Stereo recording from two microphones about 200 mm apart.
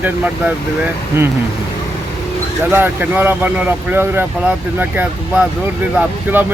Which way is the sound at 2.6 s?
10° right (ahead or behind).